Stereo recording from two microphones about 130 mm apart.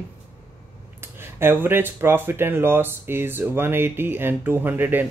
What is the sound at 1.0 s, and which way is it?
Speech, 20° right (ahead or behind).